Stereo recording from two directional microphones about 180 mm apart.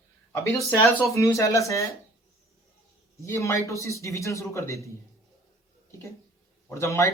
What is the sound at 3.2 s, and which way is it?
Speech, 15° left (ahead or behind).